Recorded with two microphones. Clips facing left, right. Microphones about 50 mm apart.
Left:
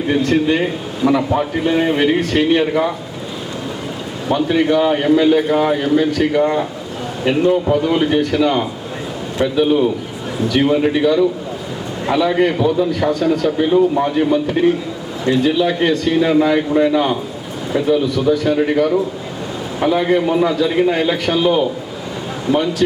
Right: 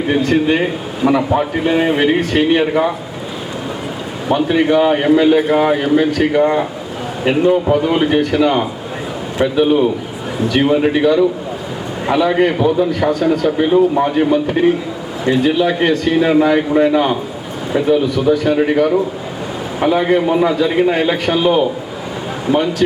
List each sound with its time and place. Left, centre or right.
0.1 s speech: right
4.3 s speech: right
13.0 s speech: centre